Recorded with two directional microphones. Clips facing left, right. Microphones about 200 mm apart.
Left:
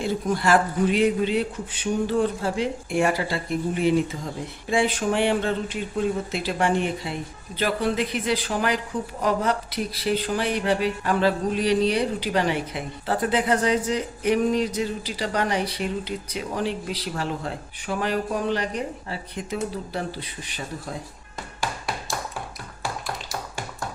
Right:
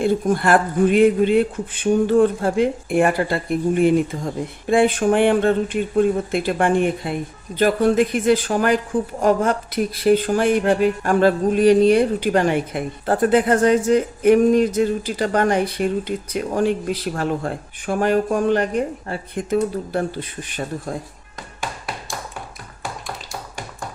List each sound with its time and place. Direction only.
0.0 s speech: 55° right (ahead or behind)